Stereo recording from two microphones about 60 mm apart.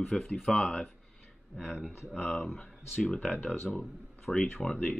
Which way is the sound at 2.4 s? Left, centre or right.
Centre.